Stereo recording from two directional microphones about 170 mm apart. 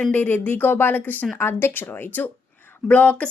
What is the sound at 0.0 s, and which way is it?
A woman's voice, 10° left (ahead or behind).